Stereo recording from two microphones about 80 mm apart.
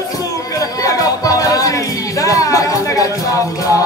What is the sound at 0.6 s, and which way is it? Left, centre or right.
Music, left.